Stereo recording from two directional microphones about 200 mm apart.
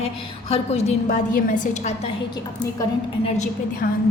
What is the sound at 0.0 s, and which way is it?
A woman's voice, 30° left (ahead or behind).